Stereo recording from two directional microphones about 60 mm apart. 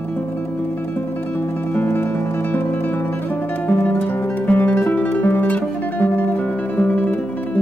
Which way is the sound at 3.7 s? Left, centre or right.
Left.